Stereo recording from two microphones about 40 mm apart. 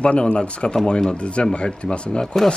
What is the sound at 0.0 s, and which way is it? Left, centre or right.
Speech, left.